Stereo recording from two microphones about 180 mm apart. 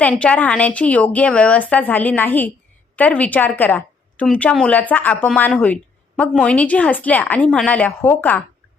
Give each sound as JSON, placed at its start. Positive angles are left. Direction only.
{"t": 0.0, "sound": "a woman's voice", "side_deg": 5}